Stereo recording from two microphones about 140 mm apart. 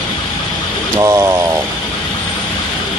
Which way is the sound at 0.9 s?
20° right (ahead or behind).